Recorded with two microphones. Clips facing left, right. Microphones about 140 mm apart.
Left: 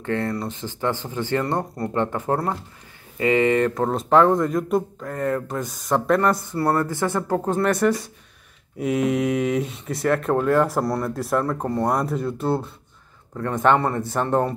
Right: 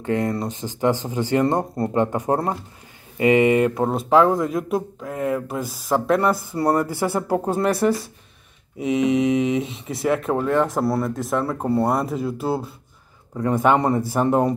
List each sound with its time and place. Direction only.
0.0 s speech: 15° right (ahead or behind)